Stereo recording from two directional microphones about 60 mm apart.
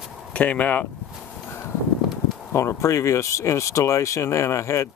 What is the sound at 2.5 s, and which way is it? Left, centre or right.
Speech, left.